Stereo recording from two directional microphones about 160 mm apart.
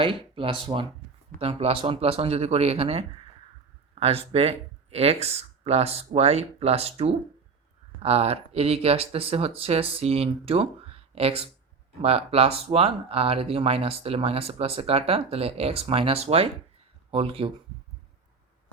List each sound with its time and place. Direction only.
0.0 s speech: 35° right (ahead or behind)